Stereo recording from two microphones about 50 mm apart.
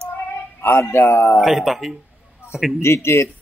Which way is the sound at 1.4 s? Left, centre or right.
Centre.